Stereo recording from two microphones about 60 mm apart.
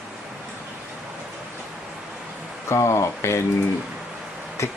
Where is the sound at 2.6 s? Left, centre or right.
Left.